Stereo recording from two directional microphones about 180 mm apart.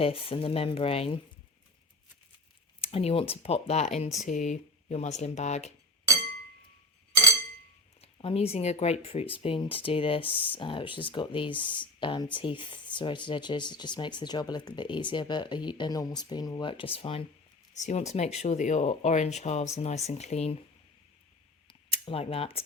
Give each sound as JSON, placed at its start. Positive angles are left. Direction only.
{"t": 0.0, "sound": "speech", "side_deg": 30}
{"t": 2.8, "sound": "speech", "side_deg": 35}
{"t": 8.0, "sound": "speech", "side_deg": 35}
{"t": 21.7, "sound": "a sound", "side_deg": 30}